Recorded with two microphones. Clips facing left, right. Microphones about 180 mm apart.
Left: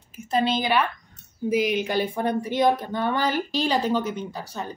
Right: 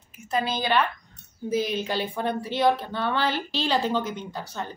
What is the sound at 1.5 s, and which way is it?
Speech, 15° left (ahead or behind).